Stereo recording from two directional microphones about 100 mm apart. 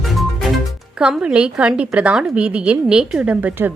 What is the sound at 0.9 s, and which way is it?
A woman's voice, 10° right (ahead or behind).